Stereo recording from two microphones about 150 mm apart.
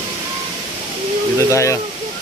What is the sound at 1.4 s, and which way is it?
Speech, 20° left (ahead or behind).